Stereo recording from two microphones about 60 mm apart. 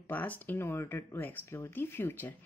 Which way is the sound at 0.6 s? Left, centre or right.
Left.